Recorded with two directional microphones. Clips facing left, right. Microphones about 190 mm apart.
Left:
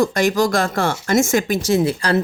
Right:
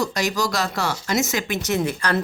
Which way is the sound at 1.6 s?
30° left (ahead or behind).